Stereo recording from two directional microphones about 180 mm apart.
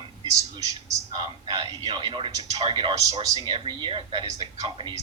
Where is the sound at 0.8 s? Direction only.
25° right (ahead or behind).